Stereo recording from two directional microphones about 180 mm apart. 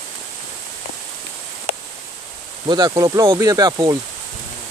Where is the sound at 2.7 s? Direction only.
20° right (ahead or behind).